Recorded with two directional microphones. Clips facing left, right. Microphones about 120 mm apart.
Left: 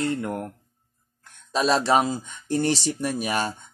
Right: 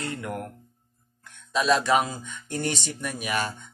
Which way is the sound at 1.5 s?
30° left (ahead or behind).